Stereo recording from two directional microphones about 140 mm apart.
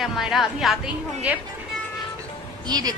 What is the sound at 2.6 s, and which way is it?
Speech, 30° right (ahead or behind).